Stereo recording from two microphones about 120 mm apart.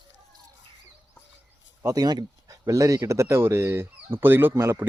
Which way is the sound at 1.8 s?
30° right (ahead or behind).